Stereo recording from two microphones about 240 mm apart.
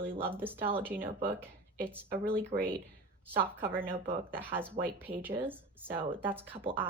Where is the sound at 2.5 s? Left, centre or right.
Right.